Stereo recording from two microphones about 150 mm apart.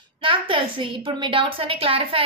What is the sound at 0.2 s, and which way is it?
A woman's voice, 35° right (ahead or behind).